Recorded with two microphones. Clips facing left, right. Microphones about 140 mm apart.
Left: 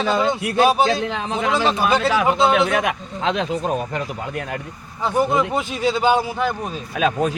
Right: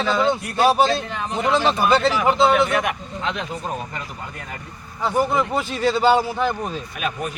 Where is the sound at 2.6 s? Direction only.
90° left.